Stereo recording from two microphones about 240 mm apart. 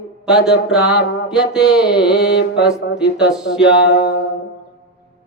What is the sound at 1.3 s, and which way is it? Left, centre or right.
Speech, centre.